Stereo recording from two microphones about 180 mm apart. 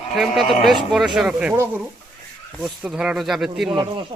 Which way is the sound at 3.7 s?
25° right (ahead or behind).